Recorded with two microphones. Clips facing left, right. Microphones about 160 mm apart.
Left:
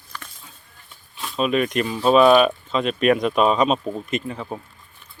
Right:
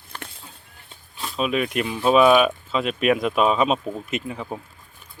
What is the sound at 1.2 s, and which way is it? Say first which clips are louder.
Speech: left 2 dB; centre (ahead or behind).